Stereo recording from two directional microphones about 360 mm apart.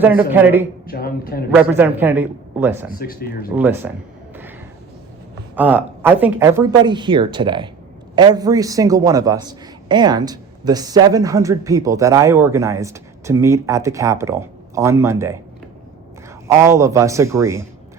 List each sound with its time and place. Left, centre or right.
0.0 s speech: centre
0.9 s speech: left
1.5 s speech: centre
3.0 s speech: left
3.5 s speech: centre
5.5 s a man's voice: centre
16.5 s a man's voice: centre